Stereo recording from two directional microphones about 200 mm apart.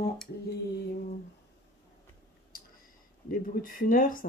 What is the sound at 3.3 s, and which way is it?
Speech, 45° left (ahead or behind).